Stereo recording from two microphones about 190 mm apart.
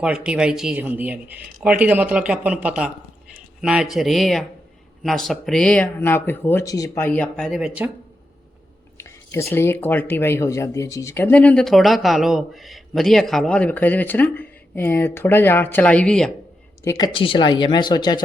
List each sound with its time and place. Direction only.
0.0 s speech: 5° right (ahead or behind)
9.0 s speech: 15° left (ahead or behind)
16.8 s speech: 15° left (ahead or behind)
17.1 s speech: 25° left (ahead or behind)